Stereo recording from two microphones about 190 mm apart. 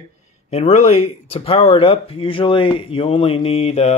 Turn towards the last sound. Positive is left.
turn(degrees=35)  # may be behind; listen again after turning